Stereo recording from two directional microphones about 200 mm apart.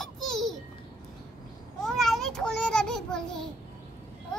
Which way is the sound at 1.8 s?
Centre (ahead or behind).